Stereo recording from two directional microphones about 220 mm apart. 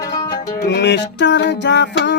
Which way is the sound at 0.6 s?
50° left (ahead or behind).